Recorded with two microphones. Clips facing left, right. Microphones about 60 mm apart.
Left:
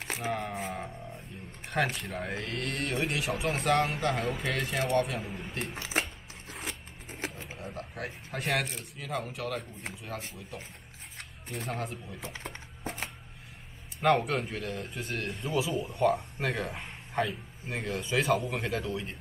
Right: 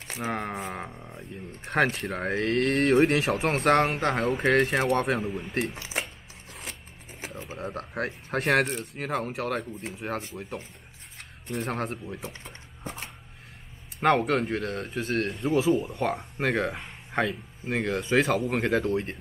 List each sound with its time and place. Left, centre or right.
0.2 s speech: right
0.8 s speech: right
2.0 s speech: right
5.2 s speech: centre
6.5 s scissors: centre
7.2 s a sound: centre
7.5 s speech: right
11.4 s speech: right
14.0 s speech: right
15.7 s speech: right